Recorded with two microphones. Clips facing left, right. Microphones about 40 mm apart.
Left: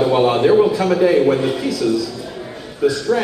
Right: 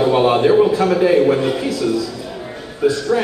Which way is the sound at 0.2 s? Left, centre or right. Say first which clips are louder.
Even; centre.